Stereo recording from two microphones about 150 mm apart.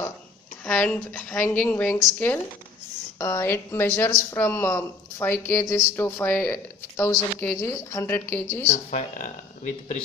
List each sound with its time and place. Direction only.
0.7 s speech: 5° left (ahead or behind)
8.6 s speech: 55° left (ahead or behind)